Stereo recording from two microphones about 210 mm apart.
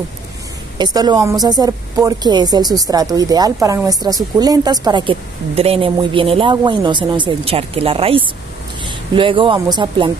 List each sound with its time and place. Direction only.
0.7 s a woman's voice: 20° right (ahead or behind)